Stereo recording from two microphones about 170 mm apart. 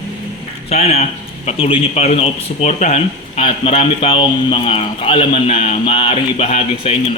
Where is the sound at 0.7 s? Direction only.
40° left (ahead or behind).